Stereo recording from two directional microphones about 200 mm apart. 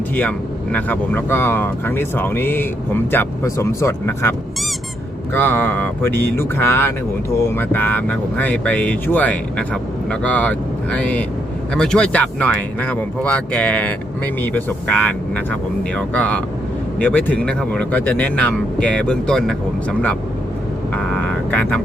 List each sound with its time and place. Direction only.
0.2 s speech: 5° left (ahead or behind)
20.9 s vehicle: 5° left (ahead or behind)